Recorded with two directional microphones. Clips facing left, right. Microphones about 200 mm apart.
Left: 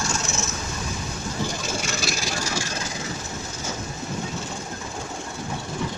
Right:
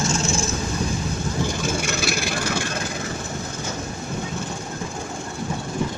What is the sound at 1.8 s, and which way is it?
Vehicle, 60° right (ahead or behind).